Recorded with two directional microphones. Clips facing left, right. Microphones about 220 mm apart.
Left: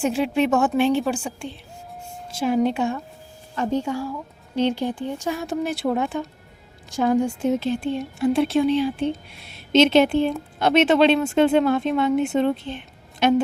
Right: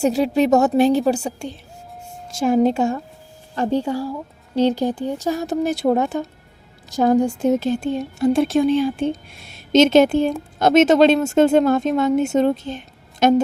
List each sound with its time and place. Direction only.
0.0 s speech: 40° right (ahead or behind)
2.6 s speech: 40° right (ahead or behind)